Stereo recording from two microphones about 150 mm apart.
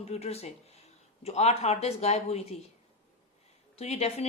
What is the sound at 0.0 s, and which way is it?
Speech, 45° left (ahead or behind).